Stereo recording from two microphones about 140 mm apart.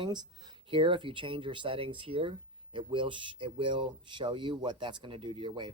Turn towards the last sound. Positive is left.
turn(degrees=-35)  # may be behind; listen again after turning